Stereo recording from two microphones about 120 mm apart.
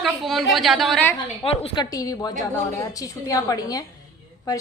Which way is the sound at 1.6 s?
40° left (ahead or behind).